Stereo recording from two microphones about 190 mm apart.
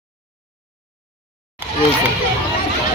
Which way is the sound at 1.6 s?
10° right (ahead or behind).